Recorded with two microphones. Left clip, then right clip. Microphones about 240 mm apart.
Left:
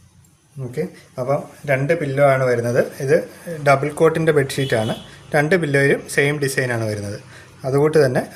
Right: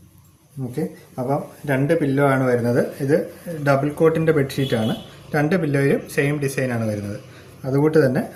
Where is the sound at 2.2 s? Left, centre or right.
Left.